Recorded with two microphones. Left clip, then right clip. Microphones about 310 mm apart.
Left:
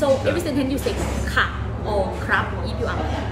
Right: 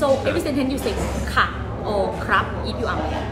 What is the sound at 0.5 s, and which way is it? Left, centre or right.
A woman's voice, centre.